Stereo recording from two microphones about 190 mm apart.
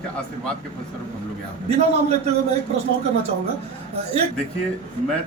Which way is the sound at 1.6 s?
35° right (ahead or behind).